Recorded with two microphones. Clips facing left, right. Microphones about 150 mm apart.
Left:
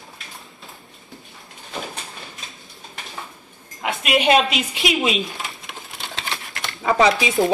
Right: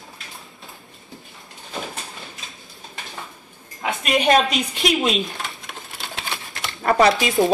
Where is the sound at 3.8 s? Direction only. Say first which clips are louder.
Even; centre (ahead or behind).